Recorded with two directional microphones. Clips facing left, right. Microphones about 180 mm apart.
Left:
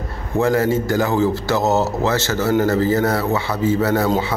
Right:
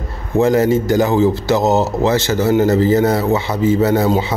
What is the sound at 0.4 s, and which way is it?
Speech, 20° right (ahead or behind).